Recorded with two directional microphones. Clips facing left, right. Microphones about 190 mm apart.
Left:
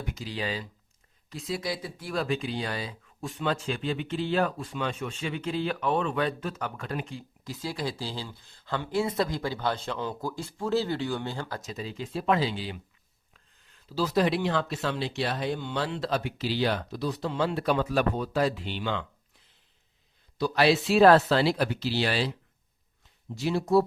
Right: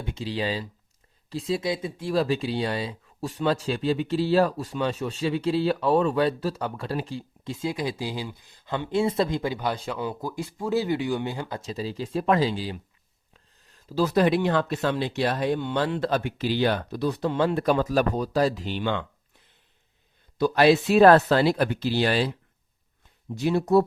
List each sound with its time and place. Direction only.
0.0 s speech: 30° right (ahead or behind)
11.6 s speech: 30° right (ahead or behind); by 19.0 s 50° right (ahead or behind)
20.7 s speech: 55° right (ahead or behind)
23.4 s speech: 60° right (ahead or behind)